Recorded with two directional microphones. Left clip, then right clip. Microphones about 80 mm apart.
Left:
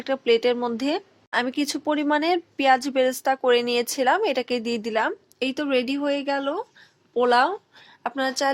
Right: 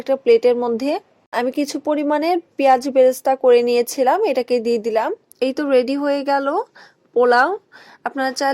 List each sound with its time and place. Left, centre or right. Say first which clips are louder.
0.0 s speech: right 7 dB; right